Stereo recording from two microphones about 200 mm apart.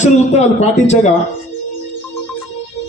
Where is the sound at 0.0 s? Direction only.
35° left (ahead or behind).